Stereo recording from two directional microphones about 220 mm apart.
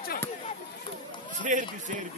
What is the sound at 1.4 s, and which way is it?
Speech, 35° right (ahead or behind).